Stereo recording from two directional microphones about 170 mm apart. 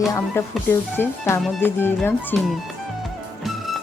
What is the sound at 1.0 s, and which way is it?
Speech, 15° left (ahead or behind).